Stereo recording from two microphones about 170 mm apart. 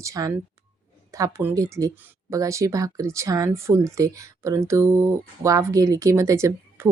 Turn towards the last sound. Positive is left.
turn(degrees=-15)  # may be behind; listen again after turning